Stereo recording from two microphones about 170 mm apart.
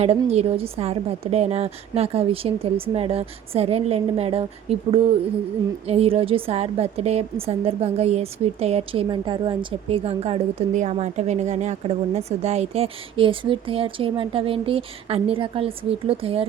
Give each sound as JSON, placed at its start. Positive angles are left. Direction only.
{"t": 0.0, "sound": "a woman's voice", "side_deg": -40}